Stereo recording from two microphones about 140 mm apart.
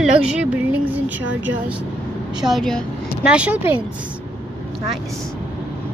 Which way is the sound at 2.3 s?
Centre (ahead or behind).